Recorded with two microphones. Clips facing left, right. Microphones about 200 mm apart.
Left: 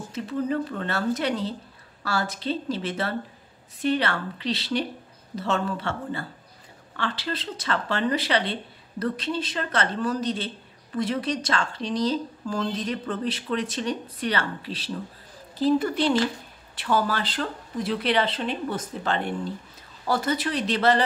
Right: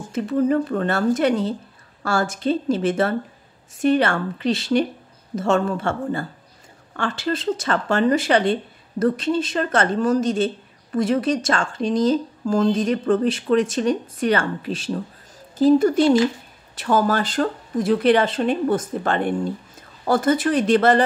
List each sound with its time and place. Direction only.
0.1 s speech: 50° right (ahead or behind)